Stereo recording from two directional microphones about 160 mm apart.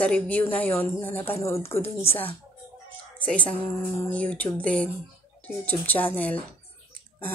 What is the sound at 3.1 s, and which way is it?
A woman's voice, 10° left (ahead or behind).